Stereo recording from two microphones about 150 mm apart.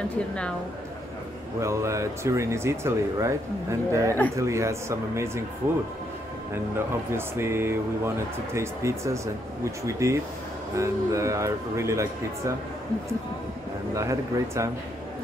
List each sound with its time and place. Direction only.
1.6 s speech: 20° right (ahead or behind)
7.1 s speech: 15° right (ahead or behind)
13.9 s speech: 20° right (ahead or behind)